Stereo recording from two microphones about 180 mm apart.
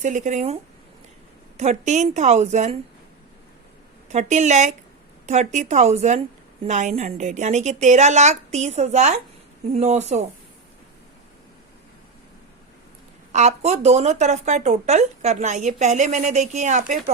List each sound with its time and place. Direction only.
0.0 s speech: 45° right (ahead or behind)
4.1 s speech: 40° right (ahead or behind)
13.3 s speech: 40° right (ahead or behind)